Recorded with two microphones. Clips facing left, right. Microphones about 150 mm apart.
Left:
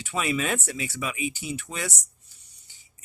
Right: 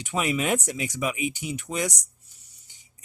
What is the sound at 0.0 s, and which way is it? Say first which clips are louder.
Speech: right 1 dB; 15° right (ahead or behind).